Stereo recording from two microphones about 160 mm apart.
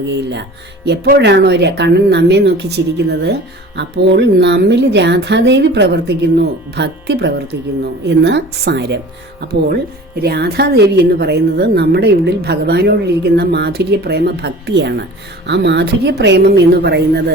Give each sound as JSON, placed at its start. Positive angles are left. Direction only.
{"t": 0.1, "sound": "a woman's voice", "side_deg": -90}